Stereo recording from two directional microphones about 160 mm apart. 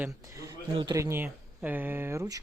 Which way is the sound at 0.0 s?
20° right (ahead or behind).